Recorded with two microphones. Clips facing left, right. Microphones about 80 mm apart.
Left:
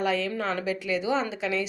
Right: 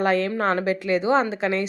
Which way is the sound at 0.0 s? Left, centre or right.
Right.